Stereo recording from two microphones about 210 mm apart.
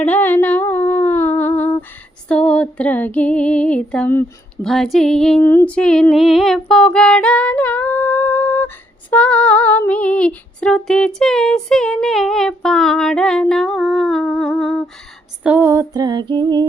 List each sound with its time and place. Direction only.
0.0 s humming: 10° left (ahead or behind)
2.2 s female singing: 5° left (ahead or behind)
15.4 s female singing: 10° right (ahead or behind)